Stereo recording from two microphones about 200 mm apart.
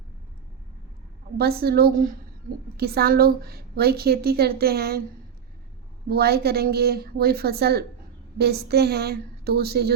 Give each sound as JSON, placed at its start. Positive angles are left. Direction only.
{"t": 1.4, "sound": "a woman's voice", "side_deg": -50}
{"t": 6.1, "sound": "a woman's voice", "side_deg": -50}